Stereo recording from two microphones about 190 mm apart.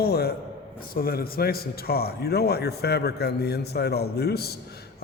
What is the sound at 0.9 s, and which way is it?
A man's voice, 50° left (ahead or behind).